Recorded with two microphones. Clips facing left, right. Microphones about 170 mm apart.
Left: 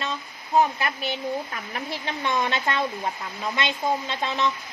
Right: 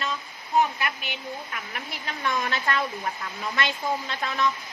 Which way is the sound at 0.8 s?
30° left (ahead or behind).